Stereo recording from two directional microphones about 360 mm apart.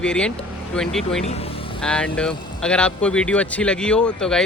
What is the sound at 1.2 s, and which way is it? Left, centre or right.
Speech, centre.